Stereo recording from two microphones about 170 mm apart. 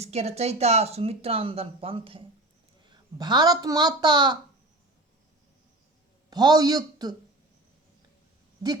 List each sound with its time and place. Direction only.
0.0 s speech: 40° right (ahead or behind)
6.3 s speech: 25° right (ahead or behind)